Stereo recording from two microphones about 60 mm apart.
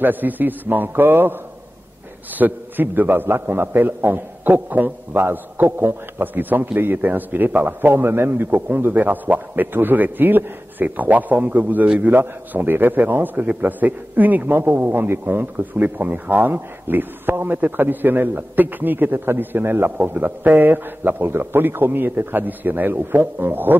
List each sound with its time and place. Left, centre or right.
0.0 s a man's voice: right
12.2 s a man's voice: right